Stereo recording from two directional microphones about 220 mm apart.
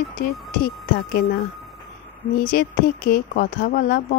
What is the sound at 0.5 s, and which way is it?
Speech, 40° left (ahead or behind).